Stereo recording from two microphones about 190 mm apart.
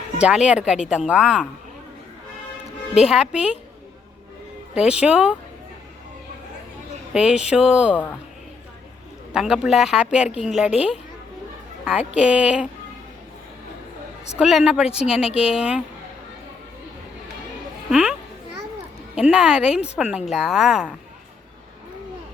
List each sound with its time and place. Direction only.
0.2 s speech: 5° right (ahead or behind)
3.0 s speech: 5° right (ahead or behind)
4.7 s speech: 5° right (ahead or behind)
7.1 s speech: 5° right (ahead or behind)
9.3 s speech: 5° right (ahead or behind)
11.9 s speech: 5° right (ahead or behind)
14.3 s speech: 5° right (ahead or behind)
15.3 s speech: 30° left (ahead or behind)
15.5 s speech: 5° right (ahead or behind)
17.9 s speech: 5° right (ahead or behind)